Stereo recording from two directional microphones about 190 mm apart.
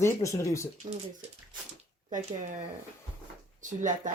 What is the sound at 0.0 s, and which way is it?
Speech, 15° left (ahead or behind).